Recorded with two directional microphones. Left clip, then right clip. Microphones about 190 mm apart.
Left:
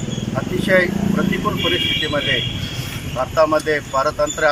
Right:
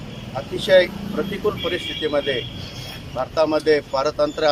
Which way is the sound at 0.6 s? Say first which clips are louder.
Right 1 dB; 20° right (ahead or behind).